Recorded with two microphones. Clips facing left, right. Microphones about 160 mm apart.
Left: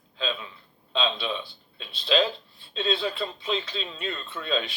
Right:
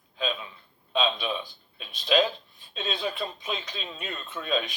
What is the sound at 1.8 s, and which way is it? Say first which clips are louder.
A man's voice: even; 15° right (ahead or behind).